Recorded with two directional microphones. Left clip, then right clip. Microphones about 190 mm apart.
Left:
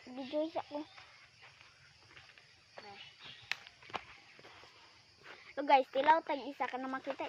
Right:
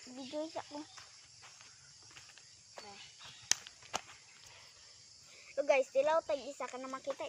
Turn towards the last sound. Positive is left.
turn(degrees=20)  # may be behind; listen again after turning